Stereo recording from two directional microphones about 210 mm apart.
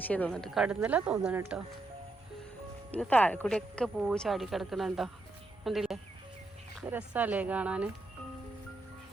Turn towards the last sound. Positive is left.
turn(degrees=-5)  # may be behind; listen again after turning